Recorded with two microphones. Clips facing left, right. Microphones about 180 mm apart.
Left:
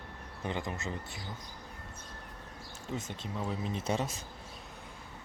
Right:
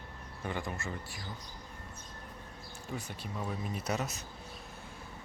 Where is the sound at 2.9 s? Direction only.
20° left (ahead or behind).